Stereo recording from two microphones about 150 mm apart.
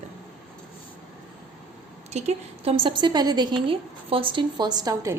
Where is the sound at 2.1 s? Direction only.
45° right (ahead or behind); by 5.2 s 25° right (ahead or behind).